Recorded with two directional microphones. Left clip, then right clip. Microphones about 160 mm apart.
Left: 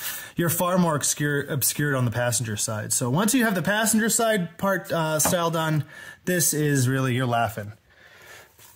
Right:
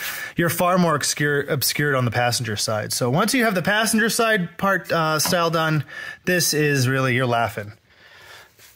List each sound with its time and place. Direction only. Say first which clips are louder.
0.1 s speech: right 4 dB; 25° right (ahead or behind)